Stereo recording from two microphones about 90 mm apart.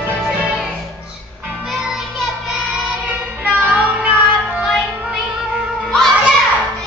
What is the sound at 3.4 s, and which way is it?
Child singing, 15° right (ahead or behind).